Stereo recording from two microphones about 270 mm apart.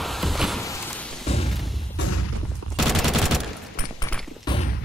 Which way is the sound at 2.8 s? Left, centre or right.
Centre.